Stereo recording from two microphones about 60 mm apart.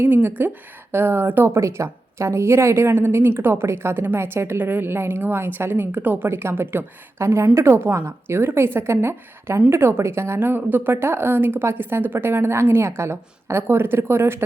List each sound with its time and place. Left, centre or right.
0.0 s a woman's voice: right
1.5 s a woman's voice: right
7.2 s a woman's voice: right
10.5 s a woman's voice: right